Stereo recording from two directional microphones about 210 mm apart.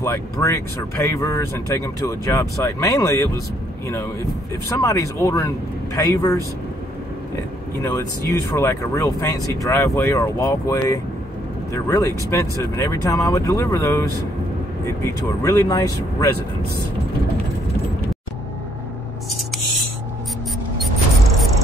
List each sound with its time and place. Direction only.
0.0 s speech: 15° left (ahead or behind)
7.8 s speech: 15° left (ahead or behind)
15.0 s speech: 15° left (ahead or behind)